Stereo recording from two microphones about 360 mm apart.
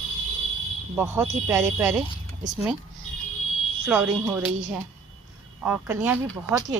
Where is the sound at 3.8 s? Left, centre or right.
Centre.